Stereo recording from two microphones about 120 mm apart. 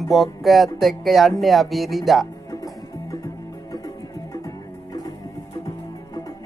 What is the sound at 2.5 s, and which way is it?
Music, 30° left (ahead or behind).